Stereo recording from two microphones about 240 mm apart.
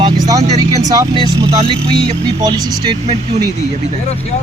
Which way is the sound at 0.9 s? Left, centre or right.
Centre.